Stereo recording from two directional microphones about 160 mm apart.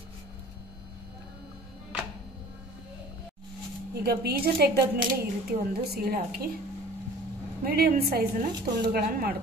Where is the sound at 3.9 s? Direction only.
80° right.